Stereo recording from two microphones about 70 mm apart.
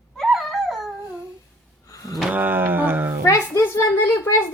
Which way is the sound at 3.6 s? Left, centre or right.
Left.